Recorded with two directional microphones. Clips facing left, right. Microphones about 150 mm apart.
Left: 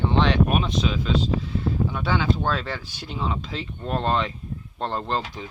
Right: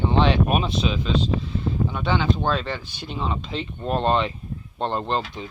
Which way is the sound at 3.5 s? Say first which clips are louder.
Right 3 dB; 20° right (ahead or behind).